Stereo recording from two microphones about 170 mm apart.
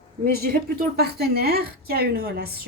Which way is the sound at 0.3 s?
65° right (ahead or behind).